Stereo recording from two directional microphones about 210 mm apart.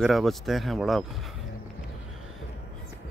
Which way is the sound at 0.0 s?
Centre (ahead or behind).